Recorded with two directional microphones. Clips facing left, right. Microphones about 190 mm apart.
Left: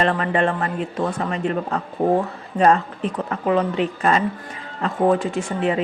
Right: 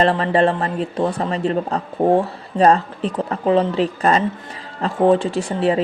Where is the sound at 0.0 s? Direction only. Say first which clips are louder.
Right 4 dB; 30° right (ahead or behind).